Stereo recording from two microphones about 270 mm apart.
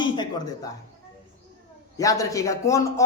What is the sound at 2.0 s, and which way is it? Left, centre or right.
Speech, centre.